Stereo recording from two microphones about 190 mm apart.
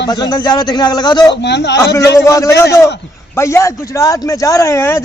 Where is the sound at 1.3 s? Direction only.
65° left (ahead or behind).